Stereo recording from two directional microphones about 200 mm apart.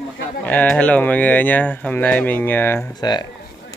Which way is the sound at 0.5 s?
5° left (ahead or behind).